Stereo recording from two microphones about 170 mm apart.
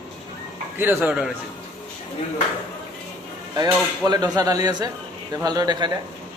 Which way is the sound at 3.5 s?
25° right (ahead or behind).